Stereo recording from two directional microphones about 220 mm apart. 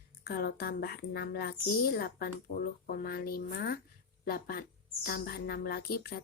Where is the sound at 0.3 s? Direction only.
45° left (ahead or behind).